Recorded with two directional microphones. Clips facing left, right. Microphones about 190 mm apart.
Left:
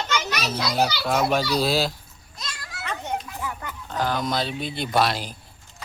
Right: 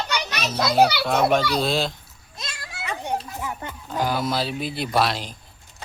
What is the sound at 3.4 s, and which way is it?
Pig, 25° right (ahead or behind).